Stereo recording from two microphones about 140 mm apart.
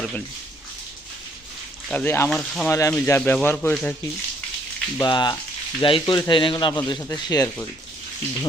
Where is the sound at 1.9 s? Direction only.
15° left (ahead or behind).